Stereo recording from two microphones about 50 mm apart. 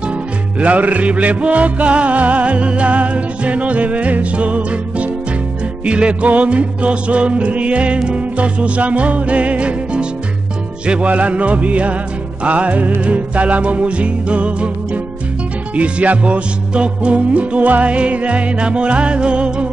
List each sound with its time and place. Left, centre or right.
0.6 s music: right
15.7 s music: right